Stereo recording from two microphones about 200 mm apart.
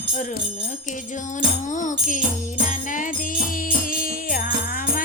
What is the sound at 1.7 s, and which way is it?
Music, 40° left (ahead or behind).